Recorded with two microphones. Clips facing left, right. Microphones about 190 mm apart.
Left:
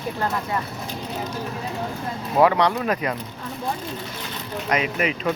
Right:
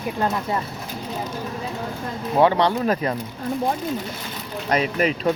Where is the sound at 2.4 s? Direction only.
30° right (ahead or behind).